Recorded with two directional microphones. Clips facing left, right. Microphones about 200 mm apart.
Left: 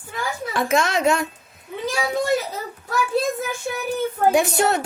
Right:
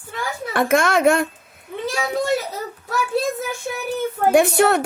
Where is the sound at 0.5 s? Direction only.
55° right (ahead or behind).